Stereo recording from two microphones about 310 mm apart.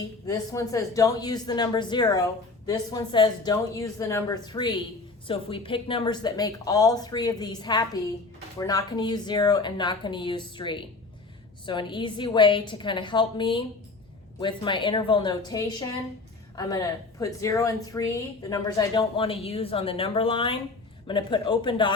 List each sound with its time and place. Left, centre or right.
0.3 s speech: centre